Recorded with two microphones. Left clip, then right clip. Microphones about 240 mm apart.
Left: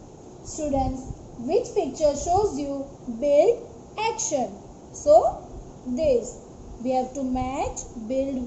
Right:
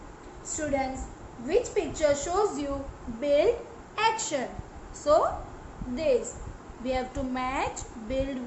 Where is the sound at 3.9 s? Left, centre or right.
Right.